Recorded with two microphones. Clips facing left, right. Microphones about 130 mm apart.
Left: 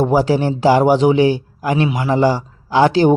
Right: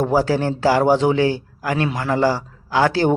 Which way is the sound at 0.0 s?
15° left (ahead or behind).